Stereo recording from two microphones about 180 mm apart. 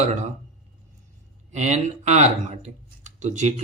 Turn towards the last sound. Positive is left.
turn(degrees=-40)  # may be behind; listen again after turning